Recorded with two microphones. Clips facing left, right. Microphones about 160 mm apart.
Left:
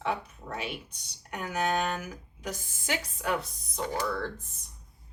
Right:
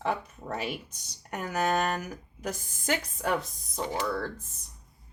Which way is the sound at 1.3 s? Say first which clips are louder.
Right 2 dB; 40° right (ahead or behind).